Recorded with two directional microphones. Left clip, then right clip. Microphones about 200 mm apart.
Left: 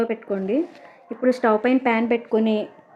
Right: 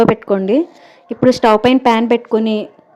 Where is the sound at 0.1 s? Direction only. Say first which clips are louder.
Right 10 dB; 40° right (ahead or behind).